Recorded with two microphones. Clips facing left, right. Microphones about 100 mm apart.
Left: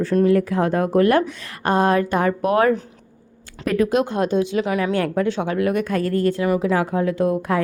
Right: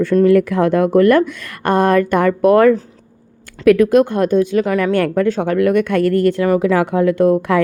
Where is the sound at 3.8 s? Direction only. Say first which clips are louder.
Right 7 dB; 50° right (ahead or behind); by 7.6 s 70° right (ahead or behind).